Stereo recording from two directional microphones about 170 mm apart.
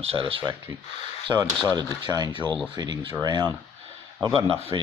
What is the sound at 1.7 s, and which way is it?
Speech, 25° right (ahead or behind).